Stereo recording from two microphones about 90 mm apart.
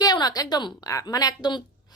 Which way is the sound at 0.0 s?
50° left (ahead or behind).